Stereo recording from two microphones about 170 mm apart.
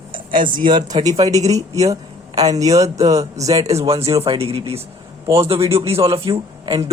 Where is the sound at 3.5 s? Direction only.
40° right (ahead or behind).